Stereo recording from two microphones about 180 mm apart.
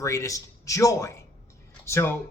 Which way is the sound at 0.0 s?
15° left (ahead or behind).